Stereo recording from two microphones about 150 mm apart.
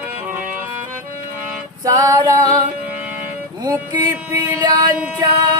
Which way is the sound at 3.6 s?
25° right (ahead or behind).